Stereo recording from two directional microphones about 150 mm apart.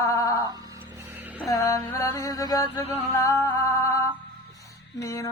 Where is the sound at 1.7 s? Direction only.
20° left (ahead or behind).